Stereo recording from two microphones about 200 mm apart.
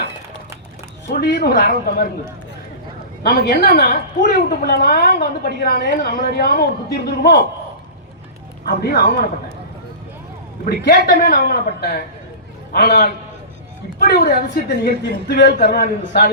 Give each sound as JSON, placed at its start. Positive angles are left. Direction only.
{"t": 1.0, "sound": "a woman's voice", "side_deg": 50}
{"t": 3.2, "sound": "a woman's voice", "side_deg": 50}
{"t": 8.6, "sound": "a woman's voice", "side_deg": 50}
{"t": 10.7, "sound": "a woman's voice", "side_deg": 50}